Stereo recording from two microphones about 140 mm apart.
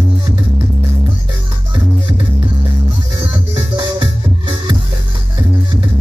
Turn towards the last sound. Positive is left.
turn(degrees=-35)  # may be behind; listen again after turning